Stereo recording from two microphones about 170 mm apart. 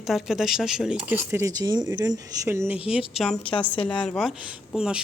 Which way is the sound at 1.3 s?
15° right (ahead or behind).